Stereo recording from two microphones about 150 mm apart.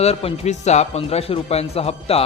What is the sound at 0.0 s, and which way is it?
A man's voice, 40° left (ahead or behind).